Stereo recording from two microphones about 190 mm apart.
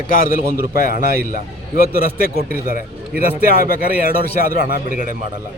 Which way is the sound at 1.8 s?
50° right (ahead or behind).